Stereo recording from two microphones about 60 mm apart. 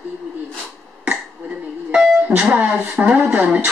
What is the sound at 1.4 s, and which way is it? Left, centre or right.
Music, right.